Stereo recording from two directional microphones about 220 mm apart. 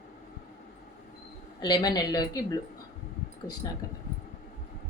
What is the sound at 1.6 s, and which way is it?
A woman's voice, 20° left (ahead or behind).